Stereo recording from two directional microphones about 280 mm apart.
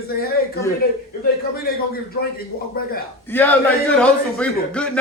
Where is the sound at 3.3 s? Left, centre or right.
Centre.